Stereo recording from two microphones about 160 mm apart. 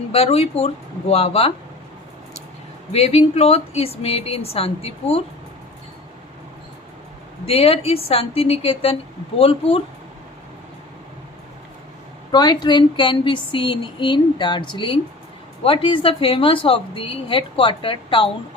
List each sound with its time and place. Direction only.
0.1 s a woman's voice: 40° left (ahead or behind)
2.9 s a woman's voice: 40° left (ahead or behind)
7.4 s a woman's voice: 40° left (ahead or behind)
12.3 s a woman's voice: 25° left (ahead or behind)